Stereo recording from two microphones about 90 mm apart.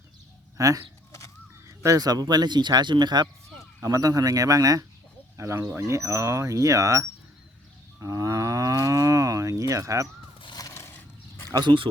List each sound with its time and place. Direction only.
0.5 s speech: 40° right (ahead or behind); by 3.2 s 55° right (ahead or behind)
3.8 s speech: 40° right (ahead or behind)
7.9 s moo: 35° right (ahead or behind)
10.6 s a sound: 35° left (ahead or behind)
11.4 s speech: 45° right (ahead or behind)